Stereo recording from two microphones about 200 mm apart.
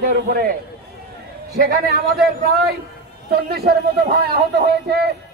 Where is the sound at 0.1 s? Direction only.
45° right (ahead or behind).